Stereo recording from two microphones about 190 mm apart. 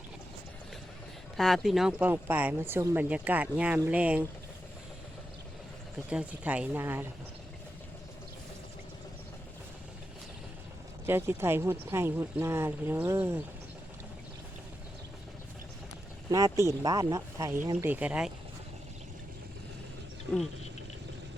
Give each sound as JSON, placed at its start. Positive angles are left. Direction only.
{"t": 1.4, "sound": "speech", "side_deg": 0}
{"t": 6.1, "sound": "speech", "side_deg": -5}
{"t": 11.0, "sound": "speech", "side_deg": -15}
{"t": 16.3, "sound": "speech", "side_deg": -15}